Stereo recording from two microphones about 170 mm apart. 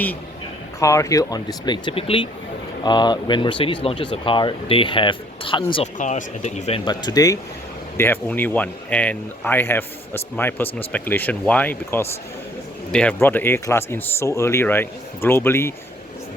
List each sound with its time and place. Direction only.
0.8 s speech: 20° left (ahead or behind)
6.0 s speech: 45° left (ahead or behind)
6.8 s speech: 25° left (ahead or behind)